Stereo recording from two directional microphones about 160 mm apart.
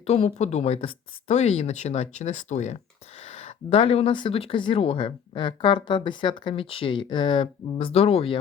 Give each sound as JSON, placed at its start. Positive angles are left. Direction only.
{"t": 0.0, "sound": "speech", "side_deg": 40}